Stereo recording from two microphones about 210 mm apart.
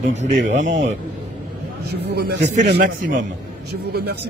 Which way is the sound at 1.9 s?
50° right (ahead or behind).